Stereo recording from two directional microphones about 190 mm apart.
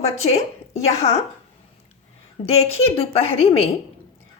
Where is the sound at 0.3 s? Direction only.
35° left (ahead or behind).